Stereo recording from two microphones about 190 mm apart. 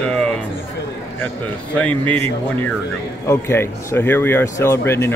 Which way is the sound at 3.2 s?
15° left (ahead or behind).